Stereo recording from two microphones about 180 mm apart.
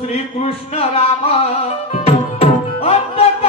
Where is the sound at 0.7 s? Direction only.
35° left (ahead or behind).